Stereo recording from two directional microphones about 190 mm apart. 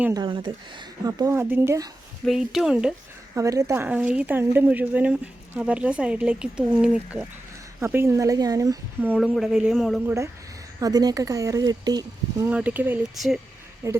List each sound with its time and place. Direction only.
0.1 s speech: 25° right (ahead or behind)
2.2 s speech: centre (ahead or behind)
3.3 s speech: 15° right (ahead or behind)
9.1 s speech: centre (ahead or behind)
10.8 s speech: 20° right (ahead or behind)
12.5 s speech: 10° right (ahead or behind)
13.8 s speech: 15° right (ahead or behind)